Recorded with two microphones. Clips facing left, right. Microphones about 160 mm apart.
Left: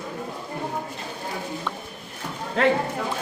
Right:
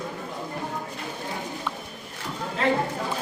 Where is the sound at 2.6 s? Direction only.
65° left (ahead or behind).